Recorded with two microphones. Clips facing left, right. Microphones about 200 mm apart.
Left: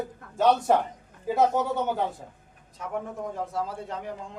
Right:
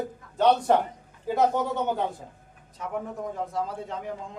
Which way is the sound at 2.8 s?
Centre (ahead or behind).